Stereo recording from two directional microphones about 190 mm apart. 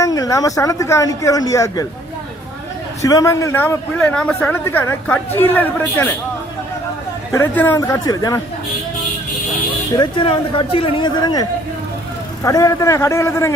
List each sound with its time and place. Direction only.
0.0 s speech: 20° left (ahead or behind)
3.0 s speech: 15° left (ahead or behind)
7.3 s speech: 10° left (ahead or behind)
10.0 s speech: 25° left (ahead or behind)